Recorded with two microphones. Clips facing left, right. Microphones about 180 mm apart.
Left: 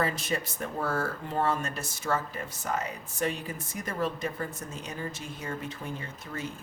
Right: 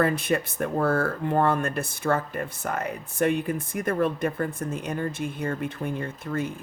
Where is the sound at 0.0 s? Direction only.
55° right (ahead or behind).